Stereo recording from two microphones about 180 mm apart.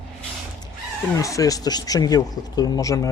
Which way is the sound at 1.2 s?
20° left (ahead or behind).